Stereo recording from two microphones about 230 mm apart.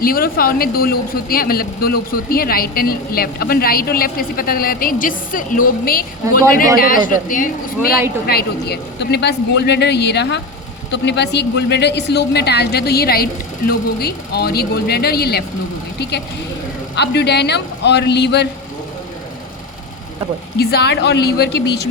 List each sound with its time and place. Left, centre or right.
0.0 s a woman's voice: left
20.6 s a woman's voice: left